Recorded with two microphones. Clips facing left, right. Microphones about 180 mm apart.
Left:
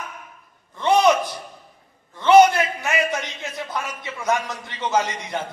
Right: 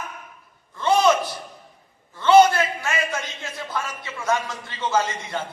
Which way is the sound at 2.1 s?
20° left (ahead or behind).